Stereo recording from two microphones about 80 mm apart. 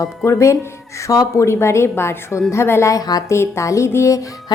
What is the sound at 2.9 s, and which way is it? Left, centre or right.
Speech, left.